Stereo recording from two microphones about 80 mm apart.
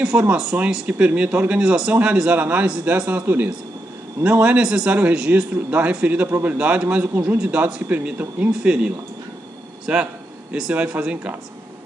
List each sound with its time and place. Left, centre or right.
0.0 s a man's voice: centre